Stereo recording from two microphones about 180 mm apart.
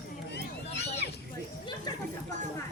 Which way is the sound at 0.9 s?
65° left (ahead or behind).